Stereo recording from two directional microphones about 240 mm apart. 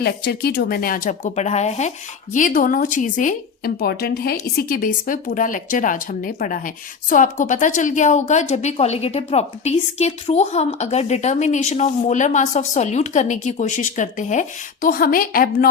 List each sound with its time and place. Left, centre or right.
0.0 s a woman's voice: left